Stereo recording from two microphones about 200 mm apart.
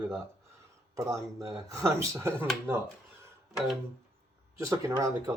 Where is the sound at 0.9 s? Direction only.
15° right (ahead or behind).